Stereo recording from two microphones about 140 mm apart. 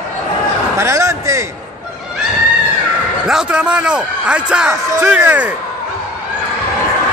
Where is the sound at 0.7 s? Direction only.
20° right (ahead or behind).